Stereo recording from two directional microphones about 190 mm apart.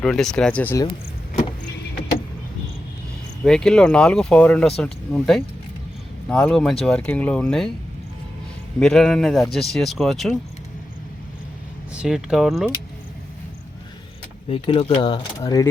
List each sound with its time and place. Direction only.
0.0 s speech: 5° left (ahead or behind)
3.4 s speech: 5° left (ahead or behind)
8.8 s speech: centre (ahead or behind)
11.9 s speech: 5° right (ahead or behind)
14.5 s speech: 30° left (ahead or behind)